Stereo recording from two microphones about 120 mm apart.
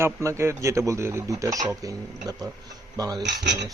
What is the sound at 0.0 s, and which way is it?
Speech, 25° right (ahead or behind).